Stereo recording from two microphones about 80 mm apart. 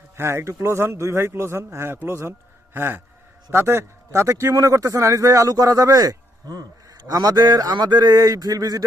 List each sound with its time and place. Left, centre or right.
0.2 s speech: right
2.7 s a sound: right
3.5 s a man's voice: right